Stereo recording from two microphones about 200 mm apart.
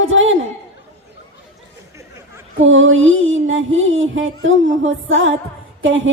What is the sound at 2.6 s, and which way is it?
Music, 75° right (ahead or behind).